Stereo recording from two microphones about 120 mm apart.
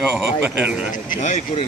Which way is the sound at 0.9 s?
85° left.